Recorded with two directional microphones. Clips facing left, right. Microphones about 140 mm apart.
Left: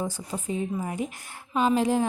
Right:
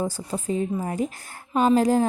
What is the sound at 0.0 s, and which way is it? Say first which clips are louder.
A woman's voice: right 4 dB; 35° right (ahead or behind).